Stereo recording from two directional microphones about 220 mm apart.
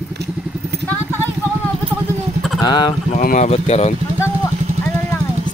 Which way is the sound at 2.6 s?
20° left (ahead or behind).